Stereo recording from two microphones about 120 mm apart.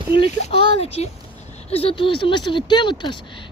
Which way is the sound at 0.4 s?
60° left (ahead or behind).